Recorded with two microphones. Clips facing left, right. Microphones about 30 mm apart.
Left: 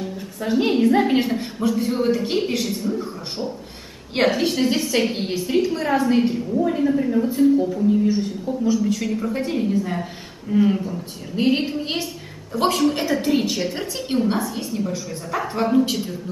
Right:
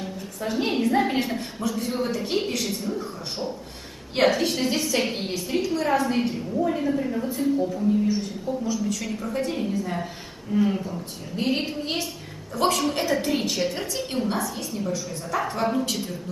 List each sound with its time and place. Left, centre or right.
0.4 s a woman's voice: centre
2.6 s a woman's voice: centre
4.1 s a woman's voice: centre